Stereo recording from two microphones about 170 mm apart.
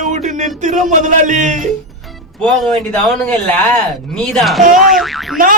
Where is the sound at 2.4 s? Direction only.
Centre (ahead or behind).